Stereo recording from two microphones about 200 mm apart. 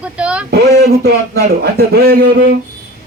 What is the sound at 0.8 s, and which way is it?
Speech, 50° right (ahead or behind).